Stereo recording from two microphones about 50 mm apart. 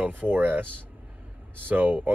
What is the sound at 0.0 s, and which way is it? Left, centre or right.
Speech, right.